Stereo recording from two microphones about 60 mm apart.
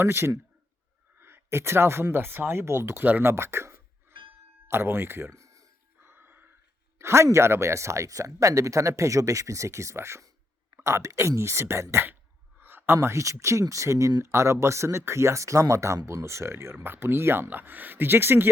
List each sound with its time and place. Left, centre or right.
0.0 s speech: right
3.0 s speech: right
3.2 s speech: right
5.4 s a sound: right
6.0 s music: right
7.0 s speech: right
12.5 s a sound: right
13.4 s speech: right
16.7 s speech: right